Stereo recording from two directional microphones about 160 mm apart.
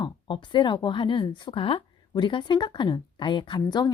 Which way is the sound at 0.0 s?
30° left (ahead or behind).